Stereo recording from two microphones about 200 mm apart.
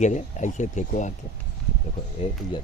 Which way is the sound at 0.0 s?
35° left (ahead or behind).